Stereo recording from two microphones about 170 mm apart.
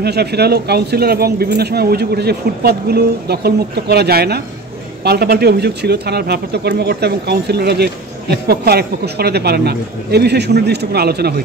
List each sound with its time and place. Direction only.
0.0 s speech: 70° right (ahead or behind)